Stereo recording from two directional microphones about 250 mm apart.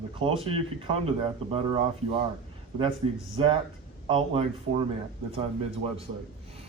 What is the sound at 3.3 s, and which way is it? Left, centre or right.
Speech, right.